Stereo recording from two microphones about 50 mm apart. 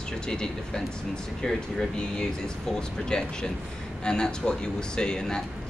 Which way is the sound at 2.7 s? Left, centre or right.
Centre.